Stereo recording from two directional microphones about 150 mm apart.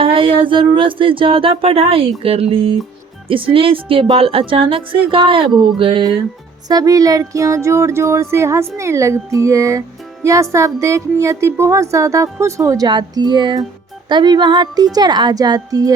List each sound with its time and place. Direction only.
0.0 s a woman's voice: 35° right (ahead or behind)